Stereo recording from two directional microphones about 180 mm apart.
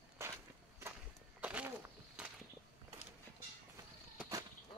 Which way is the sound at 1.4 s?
5° right (ahead or behind).